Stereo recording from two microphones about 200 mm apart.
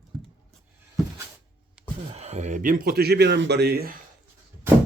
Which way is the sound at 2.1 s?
30° right (ahead or behind).